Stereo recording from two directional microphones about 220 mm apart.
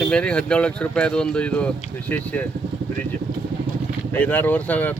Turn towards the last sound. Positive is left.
turn(degrees=5)  # may be behind; listen again after turning